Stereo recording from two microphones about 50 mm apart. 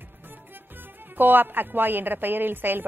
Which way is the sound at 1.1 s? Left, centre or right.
Right.